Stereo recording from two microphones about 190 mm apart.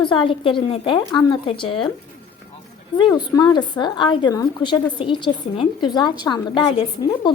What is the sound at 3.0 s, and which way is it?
A woman's voice, 20° left (ahead or behind).